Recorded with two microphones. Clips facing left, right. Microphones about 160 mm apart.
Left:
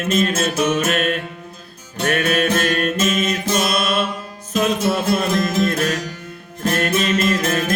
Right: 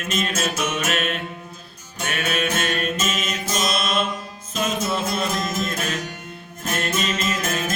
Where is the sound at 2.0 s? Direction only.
60° left (ahead or behind).